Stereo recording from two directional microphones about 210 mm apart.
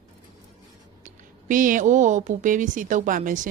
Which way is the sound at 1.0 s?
40° right (ahead or behind).